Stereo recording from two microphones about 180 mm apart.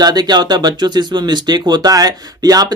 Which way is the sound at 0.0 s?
20° right (ahead or behind).